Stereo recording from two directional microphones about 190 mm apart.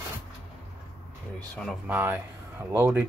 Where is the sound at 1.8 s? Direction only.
10° right (ahead or behind).